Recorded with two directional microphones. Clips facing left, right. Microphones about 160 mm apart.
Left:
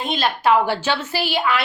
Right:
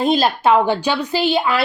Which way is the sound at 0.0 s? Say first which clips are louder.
Right 5 dB; 35° right (ahead or behind).